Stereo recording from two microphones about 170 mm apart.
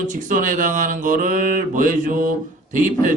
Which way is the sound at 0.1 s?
50° right (ahead or behind).